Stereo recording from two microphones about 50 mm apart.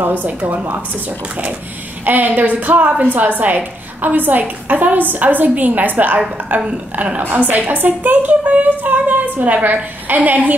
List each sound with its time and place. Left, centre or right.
0.2 s a woman's voice: right